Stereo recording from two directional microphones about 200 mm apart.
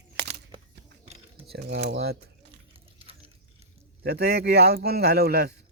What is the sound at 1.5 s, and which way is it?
Speech, 55° right (ahead or behind).